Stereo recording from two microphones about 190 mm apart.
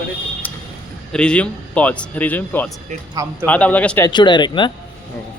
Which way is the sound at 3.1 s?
20° right (ahead or behind).